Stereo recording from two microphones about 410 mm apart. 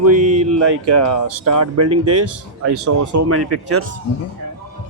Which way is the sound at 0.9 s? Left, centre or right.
Right.